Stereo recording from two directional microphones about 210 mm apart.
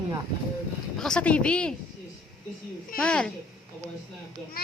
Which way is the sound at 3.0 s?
5° left (ahead or behind).